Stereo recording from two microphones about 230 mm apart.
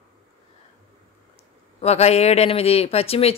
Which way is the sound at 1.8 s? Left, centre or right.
Left.